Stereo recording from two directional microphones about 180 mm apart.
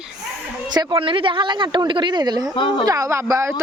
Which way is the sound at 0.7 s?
25° right (ahead or behind).